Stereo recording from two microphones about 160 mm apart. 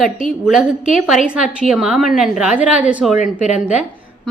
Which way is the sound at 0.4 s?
5° right (ahead or behind).